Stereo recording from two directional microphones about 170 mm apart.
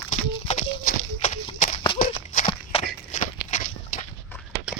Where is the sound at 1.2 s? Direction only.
45° left (ahead or behind).